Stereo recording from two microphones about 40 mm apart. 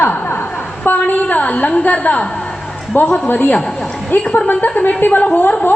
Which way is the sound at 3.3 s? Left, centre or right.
Left.